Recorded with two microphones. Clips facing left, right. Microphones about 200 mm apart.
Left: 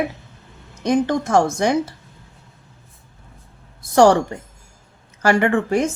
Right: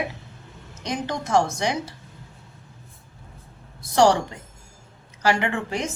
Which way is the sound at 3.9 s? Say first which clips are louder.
Left 5 dB; 50° left (ahead or behind).